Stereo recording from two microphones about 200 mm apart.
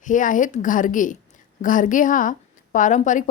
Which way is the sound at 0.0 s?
40° left (ahead or behind).